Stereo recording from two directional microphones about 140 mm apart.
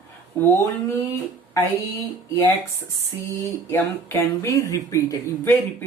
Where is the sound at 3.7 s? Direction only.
20° left (ahead or behind).